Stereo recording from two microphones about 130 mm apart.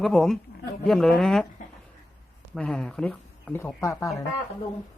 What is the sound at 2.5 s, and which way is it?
Speech, 5° left (ahead or behind).